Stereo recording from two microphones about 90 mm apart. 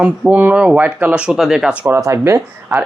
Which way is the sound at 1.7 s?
15° right (ahead or behind).